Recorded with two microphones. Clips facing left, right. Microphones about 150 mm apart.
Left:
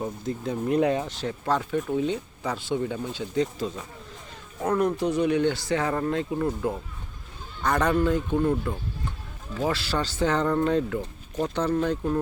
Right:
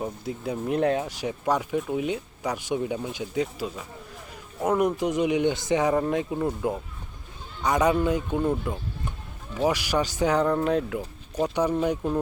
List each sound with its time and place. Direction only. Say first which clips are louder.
0.0 s speech: left 1 dB; 10° right (ahead or behind)
1.0 s speech: right 1 dB; 10° right (ahead or behind)